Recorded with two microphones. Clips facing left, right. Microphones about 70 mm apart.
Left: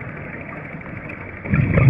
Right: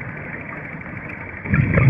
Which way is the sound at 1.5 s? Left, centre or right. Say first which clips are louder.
Even; right.